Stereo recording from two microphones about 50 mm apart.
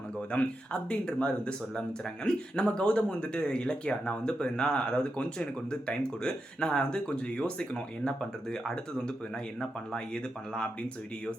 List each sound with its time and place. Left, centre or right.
0.3 s speech: left